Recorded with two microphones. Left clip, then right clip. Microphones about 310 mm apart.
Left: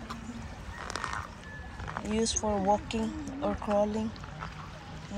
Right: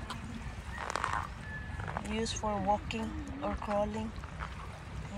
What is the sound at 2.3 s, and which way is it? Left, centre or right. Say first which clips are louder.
Speech: left 3 dB; centre.